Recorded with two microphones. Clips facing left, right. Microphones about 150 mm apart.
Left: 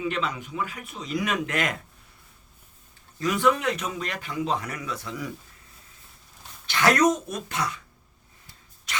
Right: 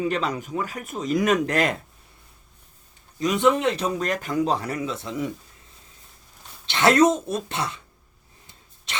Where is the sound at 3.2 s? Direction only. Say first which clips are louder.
Right 3 dB; 20° right (ahead or behind).